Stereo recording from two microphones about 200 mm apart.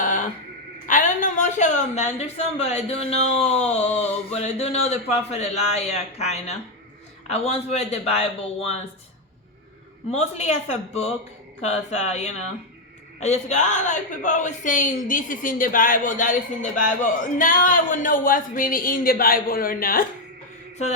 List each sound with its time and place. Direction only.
0.0 s music: 40° left (ahead or behind)
0.9 s a woman's voice: 40° left (ahead or behind)
10.1 s a woman's voice: 35° left (ahead or behind)